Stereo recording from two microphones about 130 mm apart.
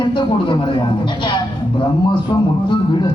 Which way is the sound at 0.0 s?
40° left (ahead or behind).